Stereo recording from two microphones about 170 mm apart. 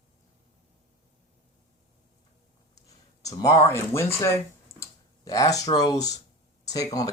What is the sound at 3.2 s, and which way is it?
Speech, 20° left (ahead or behind).